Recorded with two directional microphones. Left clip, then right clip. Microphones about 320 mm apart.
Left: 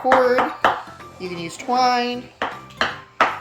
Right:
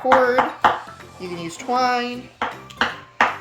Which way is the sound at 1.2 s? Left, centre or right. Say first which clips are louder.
Left 1 dB; centre.